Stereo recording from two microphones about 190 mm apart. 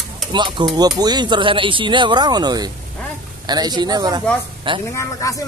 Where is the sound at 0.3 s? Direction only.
25° right (ahead or behind).